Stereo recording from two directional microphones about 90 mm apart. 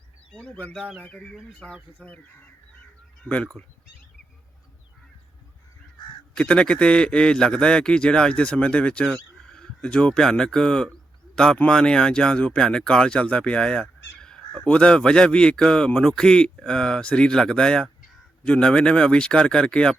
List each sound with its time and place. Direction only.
0.3 s speech: 15° left (ahead or behind)
3.2 s speech: 15° left (ahead or behind)
6.3 s speech: 10° left (ahead or behind)